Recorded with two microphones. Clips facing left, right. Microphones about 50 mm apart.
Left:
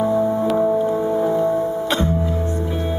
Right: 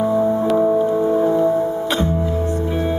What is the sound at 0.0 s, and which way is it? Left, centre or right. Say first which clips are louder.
Music: right 1 dB; centre.